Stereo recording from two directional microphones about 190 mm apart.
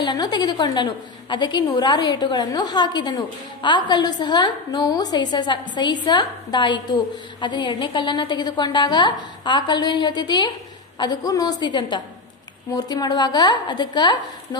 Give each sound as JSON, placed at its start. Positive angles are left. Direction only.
{"t": 0.0, "sound": "a woman's voice", "side_deg": 25}